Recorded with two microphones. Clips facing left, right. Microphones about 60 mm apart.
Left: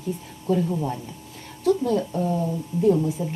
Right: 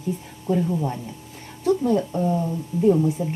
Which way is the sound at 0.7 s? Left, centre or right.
Centre.